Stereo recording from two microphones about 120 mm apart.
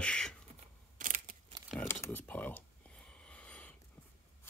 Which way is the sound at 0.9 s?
90° right.